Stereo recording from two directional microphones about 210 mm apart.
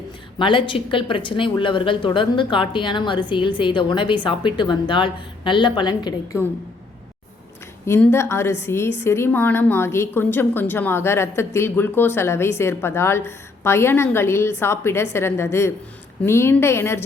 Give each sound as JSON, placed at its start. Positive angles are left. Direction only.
{"t": 0.3, "sound": "speech", "side_deg": 25}
{"t": 7.9, "sound": "a woman's voice", "side_deg": 10}